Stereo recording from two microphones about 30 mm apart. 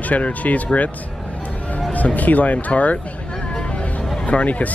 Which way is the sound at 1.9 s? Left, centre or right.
Left.